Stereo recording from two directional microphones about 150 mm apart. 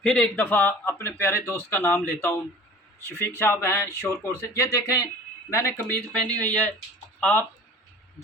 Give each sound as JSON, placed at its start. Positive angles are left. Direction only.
{"t": 0.0, "sound": "speech", "side_deg": 5}